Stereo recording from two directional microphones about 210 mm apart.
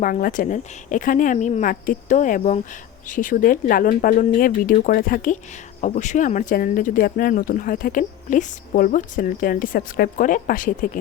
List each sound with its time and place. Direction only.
0.0 s speech: 40° left (ahead or behind)